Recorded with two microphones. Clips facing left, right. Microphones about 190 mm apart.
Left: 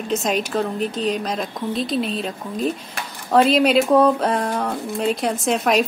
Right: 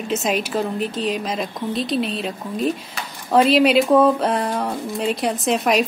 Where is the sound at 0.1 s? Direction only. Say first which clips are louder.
Even; 5° right (ahead or behind).